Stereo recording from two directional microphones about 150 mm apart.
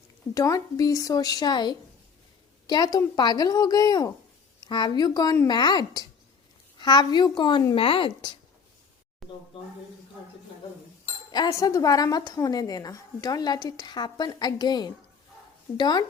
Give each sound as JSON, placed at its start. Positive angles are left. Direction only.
{"t": 0.3, "sound": "a woman's voice", "side_deg": 20}
{"t": 9.2, "sound": "a sound", "side_deg": 0}
{"t": 11.3, "sound": "a woman's voice", "side_deg": 25}